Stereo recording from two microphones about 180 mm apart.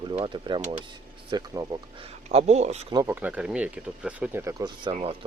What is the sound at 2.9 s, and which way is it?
Speech, 20° right (ahead or behind).